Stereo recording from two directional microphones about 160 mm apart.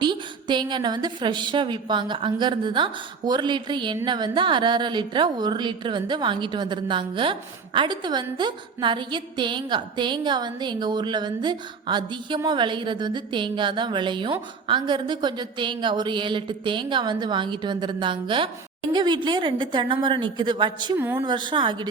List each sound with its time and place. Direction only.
0.0 s a woman's voice: 30° right (ahead or behind)